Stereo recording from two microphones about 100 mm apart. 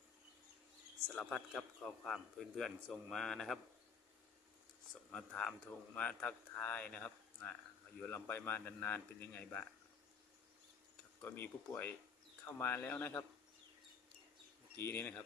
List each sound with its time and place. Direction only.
1.0 s speech: 10° left (ahead or behind)
5.1 s a man's voice: 10° left (ahead or behind)
11.2 s a man's voice: 20° left (ahead or behind)
14.8 s a man's voice: 25° left (ahead or behind)